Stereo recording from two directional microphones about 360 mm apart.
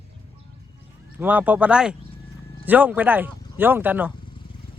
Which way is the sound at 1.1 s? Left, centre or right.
Centre.